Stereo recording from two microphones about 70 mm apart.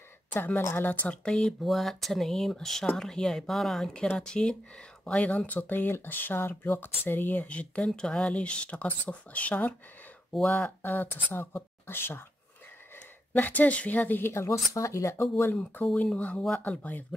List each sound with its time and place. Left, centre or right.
0.3 s speech: left
1.0 s speech: centre
1.6 s speech: centre; by 9.8 s left
10.8 s speech: left
13.3 s speech: left
15.5 s speech: left